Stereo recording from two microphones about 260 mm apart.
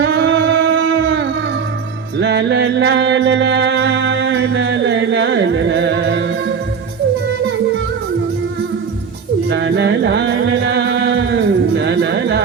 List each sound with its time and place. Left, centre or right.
0.0 s a sound: right
2.1 s music: right
9.5 s music: right